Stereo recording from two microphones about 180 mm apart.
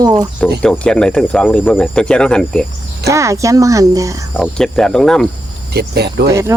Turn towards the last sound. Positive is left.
turn(degrees=-65)  # may be behind; listen again after turning